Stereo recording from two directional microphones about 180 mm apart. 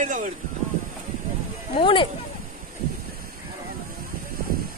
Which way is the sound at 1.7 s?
30° left (ahead or behind).